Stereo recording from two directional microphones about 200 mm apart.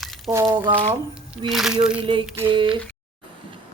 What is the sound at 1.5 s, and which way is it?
Speech, centre (ahead or behind).